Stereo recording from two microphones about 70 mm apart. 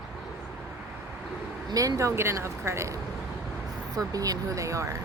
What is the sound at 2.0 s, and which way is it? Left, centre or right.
Speech, right.